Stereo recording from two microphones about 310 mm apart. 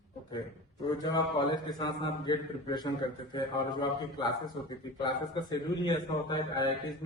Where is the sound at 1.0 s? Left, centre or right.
Centre.